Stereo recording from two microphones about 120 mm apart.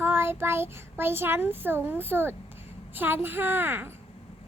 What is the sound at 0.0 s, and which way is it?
A child's voice, 20° right (ahead or behind).